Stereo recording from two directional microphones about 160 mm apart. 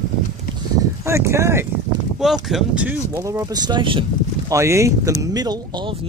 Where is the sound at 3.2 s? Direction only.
20° right (ahead or behind).